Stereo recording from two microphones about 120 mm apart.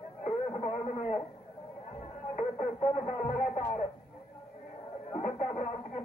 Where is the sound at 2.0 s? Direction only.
55° left (ahead or behind).